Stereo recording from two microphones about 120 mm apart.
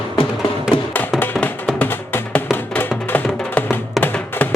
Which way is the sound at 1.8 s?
15° left (ahead or behind).